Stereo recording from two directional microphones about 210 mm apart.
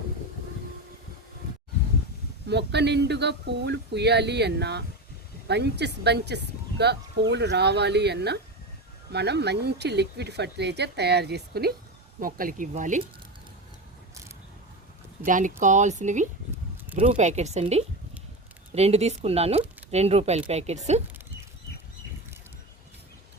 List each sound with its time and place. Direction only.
2.5 s a woman's voice: 55° right (ahead or behind); by 13.0 s 35° right (ahead or behind)
15.3 s speech: 40° right (ahead or behind)